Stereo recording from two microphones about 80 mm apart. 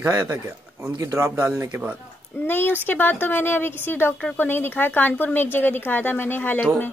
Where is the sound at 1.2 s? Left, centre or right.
Right.